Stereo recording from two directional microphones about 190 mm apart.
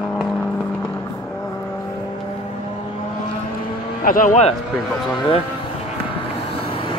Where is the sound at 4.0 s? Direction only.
45° left (ahead or behind).